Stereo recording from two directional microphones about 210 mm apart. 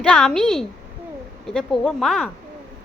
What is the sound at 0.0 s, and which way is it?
A woman's voice, centre (ahead or behind).